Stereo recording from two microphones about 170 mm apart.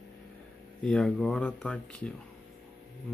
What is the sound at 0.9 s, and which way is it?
Speech, 5° left (ahead or behind).